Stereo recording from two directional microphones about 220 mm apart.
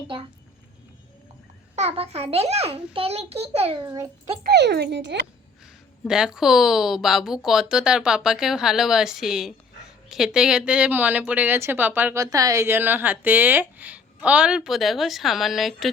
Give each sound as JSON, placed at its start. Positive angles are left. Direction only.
{"t": 1.7, "sound": "a child's voice", "side_deg": -30}
{"t": 3.8, "sound": "speech", "side_deg": -15}
{"t": 4.4, "sound": "speech", "side_deg": -50}
{"t": 6.1, "sound": "speech", "side_deg": -5}